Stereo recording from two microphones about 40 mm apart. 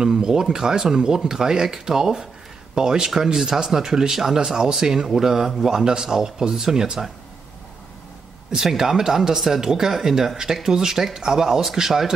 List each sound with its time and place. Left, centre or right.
0.0 s speech: centre
8.5 s speech: centre